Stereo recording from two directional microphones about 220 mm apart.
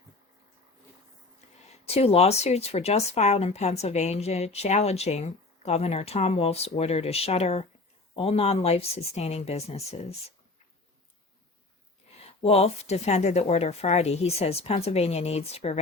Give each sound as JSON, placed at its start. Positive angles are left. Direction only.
{"t": 1.8, "sound": "speech", "side_deg": 30}
{"t": 12.2, "sound": "speech", "side_deg": 25}